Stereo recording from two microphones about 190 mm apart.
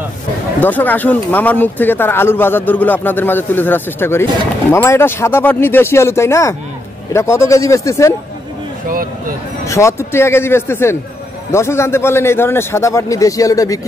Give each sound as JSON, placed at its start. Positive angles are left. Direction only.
{"t": 0.6, "sound": "speech", "side_deg": 10}
{"t": 9.7, "sound": "speech", "side_deg": 15}